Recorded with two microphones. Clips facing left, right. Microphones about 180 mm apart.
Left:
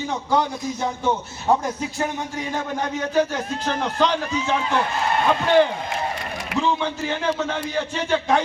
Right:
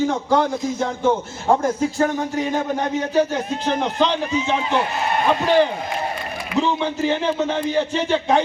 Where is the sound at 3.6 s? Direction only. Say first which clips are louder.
Right 1 dB; 15° right (ahead or behind).